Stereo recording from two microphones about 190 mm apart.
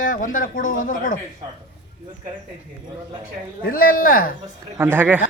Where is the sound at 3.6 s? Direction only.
50° left (ahead or behind).